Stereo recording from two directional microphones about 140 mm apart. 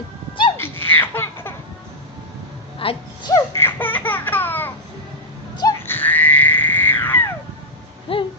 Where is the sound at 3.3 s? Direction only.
20° left (ahead or behind).